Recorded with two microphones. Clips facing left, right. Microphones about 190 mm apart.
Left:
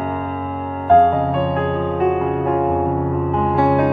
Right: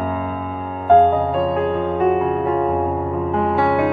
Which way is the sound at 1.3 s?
Centre (ahead or behind).